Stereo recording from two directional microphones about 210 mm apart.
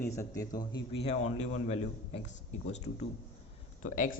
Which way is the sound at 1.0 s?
35° left (ahead or behind).